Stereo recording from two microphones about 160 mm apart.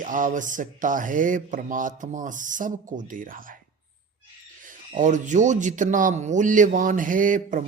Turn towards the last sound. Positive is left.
turn(degrees=-55)  # may be behind; listen again after turning